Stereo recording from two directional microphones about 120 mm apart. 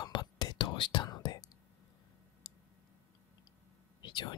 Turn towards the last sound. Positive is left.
turn(degrees=40)  # may be behind; listen again after turning